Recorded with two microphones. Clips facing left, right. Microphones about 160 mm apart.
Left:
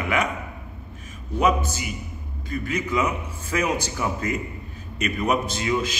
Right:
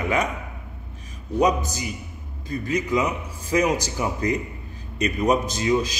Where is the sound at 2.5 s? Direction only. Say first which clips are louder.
Right 2 dB; 35° right (ahead or behind).